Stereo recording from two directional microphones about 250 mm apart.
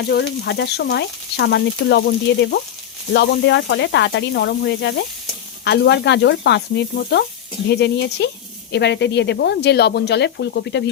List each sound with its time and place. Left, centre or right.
0.1 s frying: left